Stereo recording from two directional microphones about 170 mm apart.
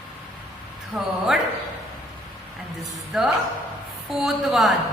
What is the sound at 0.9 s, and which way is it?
Speech, centre (ahead or behind).